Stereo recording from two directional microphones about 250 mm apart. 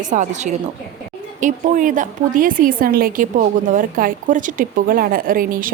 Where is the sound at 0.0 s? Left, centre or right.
Right.